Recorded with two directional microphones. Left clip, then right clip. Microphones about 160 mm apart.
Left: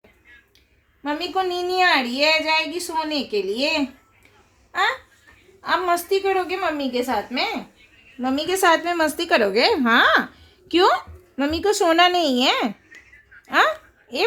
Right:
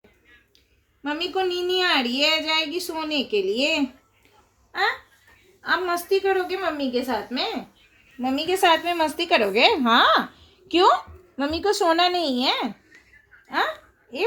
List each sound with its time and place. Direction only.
1.0 s a woman's voice: 15° left (ahead or behind)
5.6 s a woman's voice: 25° left (ahead or behind)
10.7 s speech: 25° left (ahead or behind)